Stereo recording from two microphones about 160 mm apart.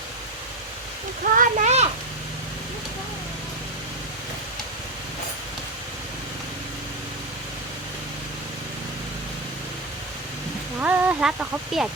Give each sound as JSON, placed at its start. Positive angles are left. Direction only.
{"t": 1.2, "sound": "a child's voice", "side_deg": -55}
{"t": 10.8, "sound": "speech", "side_deg": -10}